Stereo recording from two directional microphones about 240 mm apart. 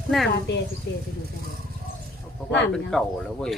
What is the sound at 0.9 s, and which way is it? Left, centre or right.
Speech, left.